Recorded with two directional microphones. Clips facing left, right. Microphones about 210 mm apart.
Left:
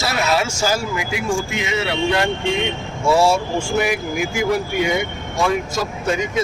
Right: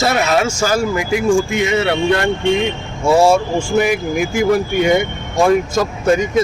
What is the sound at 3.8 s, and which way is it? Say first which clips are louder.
Speech: right 6 dB; 50° right (ahead or behind).